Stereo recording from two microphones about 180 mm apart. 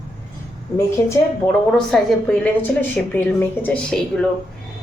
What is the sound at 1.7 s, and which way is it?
A woman's voice, centre (ahead or behind).